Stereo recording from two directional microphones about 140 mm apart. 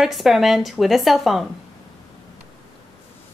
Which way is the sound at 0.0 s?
Centre (ahead or behind).